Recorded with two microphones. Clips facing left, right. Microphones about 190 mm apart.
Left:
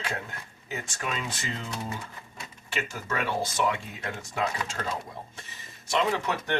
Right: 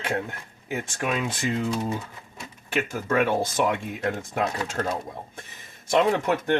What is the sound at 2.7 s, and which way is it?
Speech, 50° right (ahead or behind).